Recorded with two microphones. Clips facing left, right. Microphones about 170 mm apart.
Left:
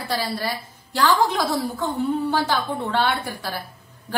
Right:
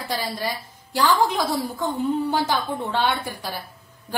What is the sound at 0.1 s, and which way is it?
A woman's voice, 15° right (ahead or behind).